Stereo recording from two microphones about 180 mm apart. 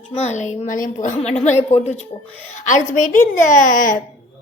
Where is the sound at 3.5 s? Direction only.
45° left (ahead or behind).